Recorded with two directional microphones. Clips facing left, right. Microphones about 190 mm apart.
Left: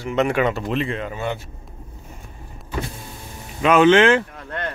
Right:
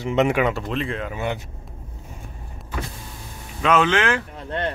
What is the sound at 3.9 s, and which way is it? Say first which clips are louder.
Speech: left 7 dB; 25° left (ahead or behind).